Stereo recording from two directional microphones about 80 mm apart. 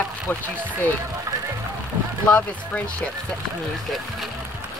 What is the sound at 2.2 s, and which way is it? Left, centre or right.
Speech, centre.